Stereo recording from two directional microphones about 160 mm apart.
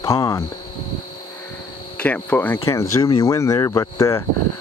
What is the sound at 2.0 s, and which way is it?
A man's voice, 10° left (ahead or behind).